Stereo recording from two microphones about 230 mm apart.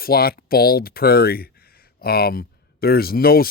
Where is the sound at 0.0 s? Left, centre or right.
Left.